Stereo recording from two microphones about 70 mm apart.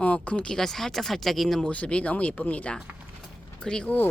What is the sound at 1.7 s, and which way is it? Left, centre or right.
Speech, centre.